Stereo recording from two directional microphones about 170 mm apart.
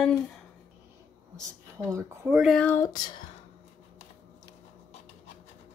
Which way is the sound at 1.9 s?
15° right (ahead or behind).